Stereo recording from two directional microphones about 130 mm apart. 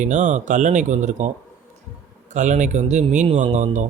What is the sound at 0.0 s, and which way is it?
Speech, 70° right (ahead or behind).